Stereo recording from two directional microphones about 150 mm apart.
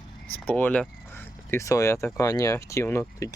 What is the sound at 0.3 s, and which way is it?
Speech, 10° left (ahead or behind).